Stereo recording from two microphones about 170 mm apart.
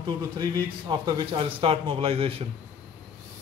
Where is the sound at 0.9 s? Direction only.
25° right (ahead or behind).